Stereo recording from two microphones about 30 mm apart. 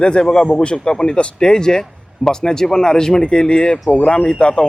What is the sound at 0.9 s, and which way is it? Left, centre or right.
Speech, left.